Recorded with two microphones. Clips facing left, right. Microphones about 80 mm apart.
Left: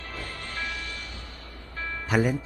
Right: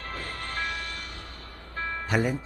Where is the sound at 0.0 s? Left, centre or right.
Right.